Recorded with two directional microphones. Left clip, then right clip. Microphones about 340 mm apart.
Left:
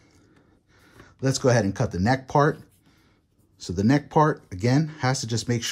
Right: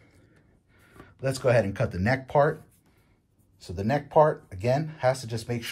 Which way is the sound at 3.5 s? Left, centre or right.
Left.